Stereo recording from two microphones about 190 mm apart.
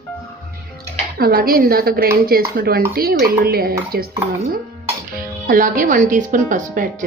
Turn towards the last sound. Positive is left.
turn(degrees=-45)  # may be behind; listen again after turning